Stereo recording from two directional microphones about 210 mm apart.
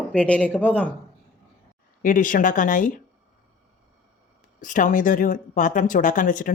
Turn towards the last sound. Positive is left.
turn(degrees=40)  # may be behind; listen again after turning